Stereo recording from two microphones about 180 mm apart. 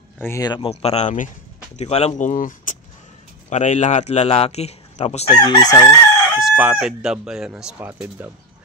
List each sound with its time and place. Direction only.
0.2 s speech: 20° left (ahead or behind)
0.6 s a man's voice: 35° left (ahead or behind)
6.4 s speech: 5° right (ahead or behind)